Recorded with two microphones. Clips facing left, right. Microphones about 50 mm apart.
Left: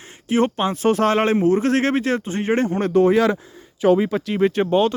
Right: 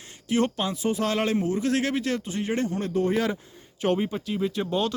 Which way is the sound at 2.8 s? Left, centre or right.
Left.